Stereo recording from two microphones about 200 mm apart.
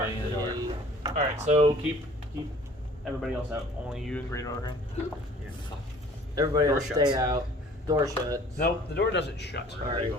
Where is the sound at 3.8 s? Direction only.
Centre (ahead or behind).